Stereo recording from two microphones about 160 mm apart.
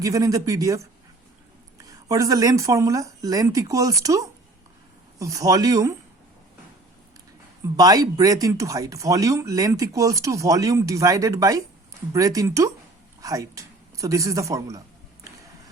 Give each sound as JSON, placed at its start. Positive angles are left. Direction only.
{"t": 0.0, "sound": "speech", "side_deg": -20}
{"t": 1.8, "sound": "speech", "side_deg": -20}
{"t": 7.8, "sound": "a man's voice", "side_deg": -25}